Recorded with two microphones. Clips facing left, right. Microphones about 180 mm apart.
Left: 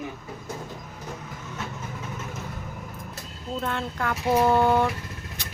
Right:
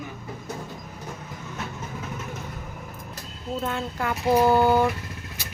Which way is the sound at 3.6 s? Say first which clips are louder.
Even; 5° right (ahead or behind).